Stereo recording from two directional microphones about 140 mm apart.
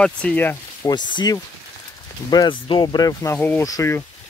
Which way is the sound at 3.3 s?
15° left (ahead or behind).